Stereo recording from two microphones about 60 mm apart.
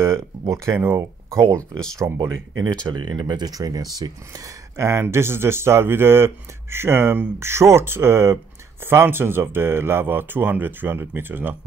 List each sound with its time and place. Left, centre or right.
0.0 s speech: right
3.4 s speech: right
4.7 s speech: right